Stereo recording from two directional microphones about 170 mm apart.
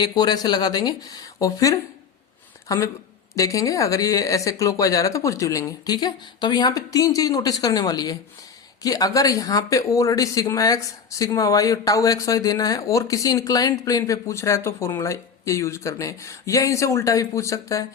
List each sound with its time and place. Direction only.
0.0 s speech: 25° left (ahead or behind)